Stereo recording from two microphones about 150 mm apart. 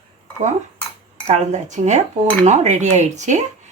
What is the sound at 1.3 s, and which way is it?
A woman's voice, 50° right (ahead or behind).